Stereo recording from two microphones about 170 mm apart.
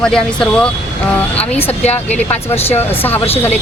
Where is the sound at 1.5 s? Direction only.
40° left (ahead or behind).